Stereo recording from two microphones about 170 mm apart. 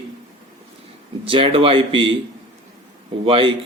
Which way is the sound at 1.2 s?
30° right (ahead or behind).